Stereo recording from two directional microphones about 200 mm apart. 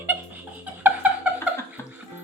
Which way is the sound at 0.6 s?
10° right (ahead or behind).